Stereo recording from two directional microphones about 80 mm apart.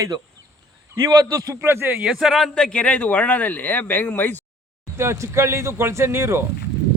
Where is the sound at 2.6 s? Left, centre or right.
Centre.